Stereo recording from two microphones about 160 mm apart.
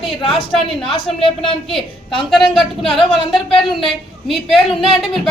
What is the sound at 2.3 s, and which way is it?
A woman's voice, centre (ahead or behind).